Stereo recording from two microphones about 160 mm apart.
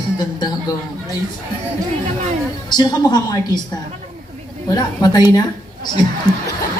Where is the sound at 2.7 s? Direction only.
25° left (ahead or behind).